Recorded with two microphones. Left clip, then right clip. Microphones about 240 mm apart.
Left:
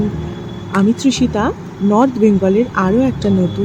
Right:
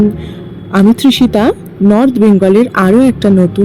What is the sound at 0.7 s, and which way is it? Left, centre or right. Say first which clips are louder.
A woman's voice: right 6 dB; centre.